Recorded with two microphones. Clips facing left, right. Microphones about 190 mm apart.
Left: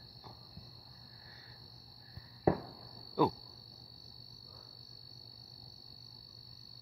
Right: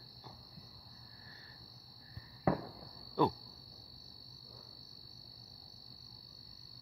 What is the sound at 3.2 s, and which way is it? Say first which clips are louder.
Owl: left 1 dB; 5° left (ahead or behind).